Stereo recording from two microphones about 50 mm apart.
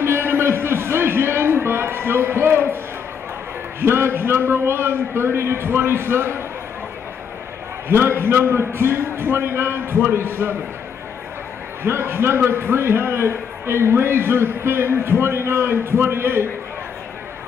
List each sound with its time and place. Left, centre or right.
0.0 s a sound: right
3.8 s a man's voice: right
7.9 s a man's voice: right
11.8 s a man's voice: right